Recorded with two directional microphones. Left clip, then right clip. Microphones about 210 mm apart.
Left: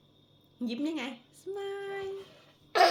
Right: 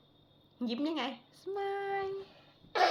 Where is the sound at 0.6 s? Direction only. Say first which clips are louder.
Even; 25° left (ahead or behind).